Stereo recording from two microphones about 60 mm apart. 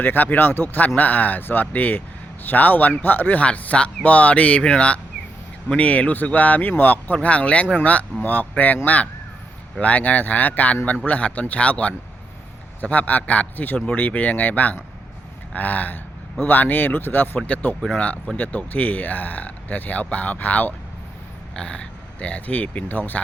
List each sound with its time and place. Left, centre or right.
0.0 s speech: left
21.5 s speech: centre